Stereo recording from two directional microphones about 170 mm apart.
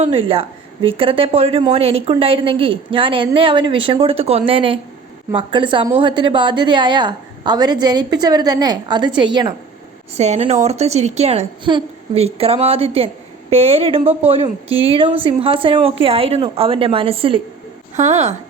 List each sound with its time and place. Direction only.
0.0 s a woman's voice: 35° right (ahead or behind)
10.2 s a woman's voice: 40° right (ahead or behind)